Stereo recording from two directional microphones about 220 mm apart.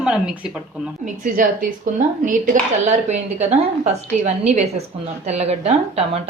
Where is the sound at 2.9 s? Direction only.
30° right (ahead or behind).